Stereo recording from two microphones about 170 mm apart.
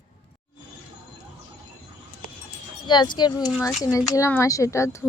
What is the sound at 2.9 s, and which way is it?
Speech, 25° left (ahead or behind).